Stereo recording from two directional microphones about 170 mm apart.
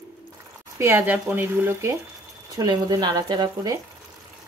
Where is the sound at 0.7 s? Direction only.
15° right (ahead or behind).